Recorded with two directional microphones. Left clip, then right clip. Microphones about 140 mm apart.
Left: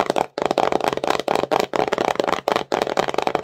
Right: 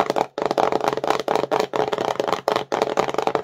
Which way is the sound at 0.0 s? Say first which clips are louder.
Left 1 dB; 25° left (ahead or behind).